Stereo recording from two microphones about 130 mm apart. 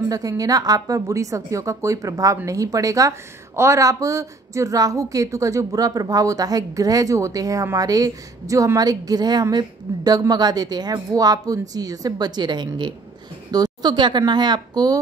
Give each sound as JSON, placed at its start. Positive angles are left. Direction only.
{"t": 0.1, "sound": "a woman's voice", "side_deg": -30}